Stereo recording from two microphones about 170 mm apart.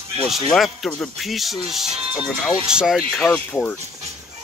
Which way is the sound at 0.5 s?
Centre (ahead or behind).